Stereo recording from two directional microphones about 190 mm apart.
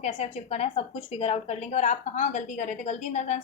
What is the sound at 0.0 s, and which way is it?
A woman's voice, 35° left (ahead or behind).